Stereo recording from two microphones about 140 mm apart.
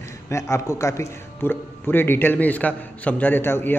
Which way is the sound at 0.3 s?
20° left (ahead or behind).